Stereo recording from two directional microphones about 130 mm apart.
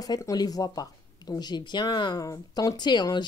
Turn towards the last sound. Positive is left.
turn(degrees=35)  # may be behind; listen again after turning